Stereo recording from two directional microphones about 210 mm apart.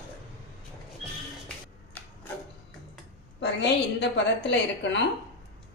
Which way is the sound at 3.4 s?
55° left (ahead or behind).